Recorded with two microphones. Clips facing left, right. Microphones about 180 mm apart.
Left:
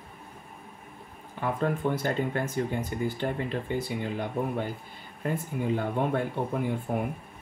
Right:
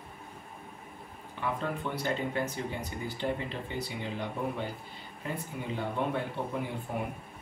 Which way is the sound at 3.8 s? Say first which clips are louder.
Left 5 dB; 50° left (ahead or behind).